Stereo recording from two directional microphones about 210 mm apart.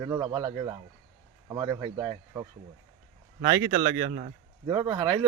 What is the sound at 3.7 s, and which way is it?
Speech, 35° right (ahead or behind).